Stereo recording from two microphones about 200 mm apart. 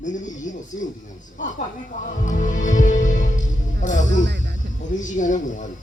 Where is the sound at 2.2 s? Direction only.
40° left (ahead or behind).